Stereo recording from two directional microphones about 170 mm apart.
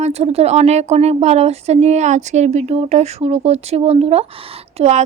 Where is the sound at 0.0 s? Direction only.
40° right (ahead or behind).